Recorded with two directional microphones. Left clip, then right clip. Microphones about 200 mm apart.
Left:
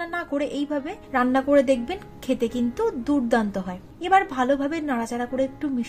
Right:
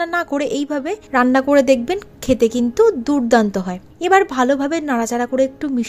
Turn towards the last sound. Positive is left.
turn(degrees=-45)  # may be behind; listen again after turning